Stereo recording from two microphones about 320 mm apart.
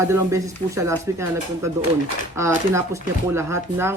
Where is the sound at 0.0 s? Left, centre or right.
Centre.